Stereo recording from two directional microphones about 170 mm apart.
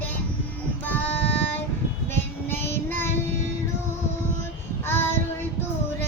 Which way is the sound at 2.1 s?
15° left (ahead or behind).